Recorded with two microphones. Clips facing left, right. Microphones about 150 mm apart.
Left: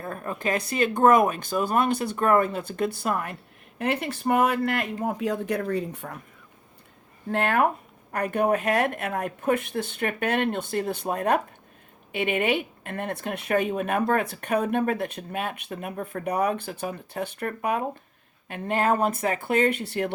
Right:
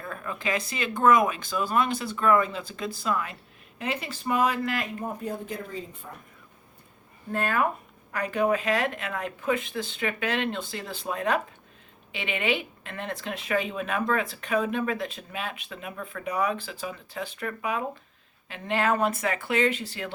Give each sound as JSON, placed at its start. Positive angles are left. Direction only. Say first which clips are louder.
{"t": 0.0, "sound": "a woman's voice", "louder": "left 3 dB", "side_deg": 40}
{"t": 5.0, "sound": "speech", "louder": "left 6 dB", "side_deg": 90}
{"t": 7.3, "sound": "a woman's voice", "louder": "left 4 dB", "side_deg": 70}
{"t": 16.2, "sound": "a woman's voice", "louder": "left 2 dB", "side_deg": 60}